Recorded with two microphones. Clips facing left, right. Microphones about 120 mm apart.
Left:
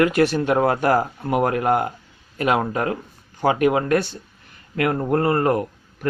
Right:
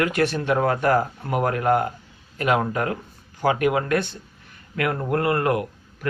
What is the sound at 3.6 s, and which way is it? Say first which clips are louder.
Speech: left 4 dB; 45° left (ahead or behind).